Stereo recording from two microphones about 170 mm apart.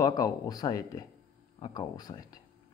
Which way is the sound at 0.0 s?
20° left (ahead or behind).